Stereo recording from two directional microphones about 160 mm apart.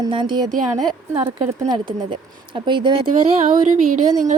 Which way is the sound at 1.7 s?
30° right (ahead or behind).